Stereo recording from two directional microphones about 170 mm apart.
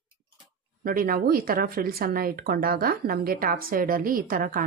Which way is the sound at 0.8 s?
55° right (ahead or behind).